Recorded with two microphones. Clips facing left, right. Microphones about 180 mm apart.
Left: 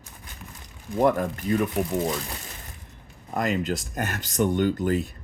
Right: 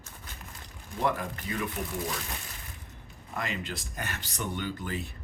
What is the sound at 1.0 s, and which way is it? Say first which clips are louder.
Speech: left 9 dB; 50° left (ahead or behind).